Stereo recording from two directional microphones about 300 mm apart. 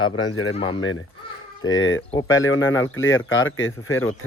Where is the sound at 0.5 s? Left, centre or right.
Centre.